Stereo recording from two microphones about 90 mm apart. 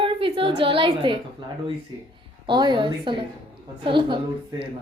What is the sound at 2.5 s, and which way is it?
A woman's voice, 60° right (ahead or behind).